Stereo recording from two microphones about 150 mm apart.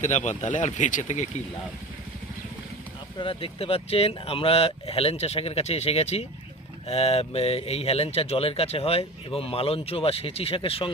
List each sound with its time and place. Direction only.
0.0 s speech: 50° left (ahead or behind)
3.2 s speech: 35° left (ahead or behind)